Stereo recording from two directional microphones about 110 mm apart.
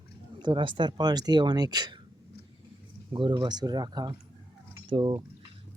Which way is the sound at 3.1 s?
45° right (ahead or behind).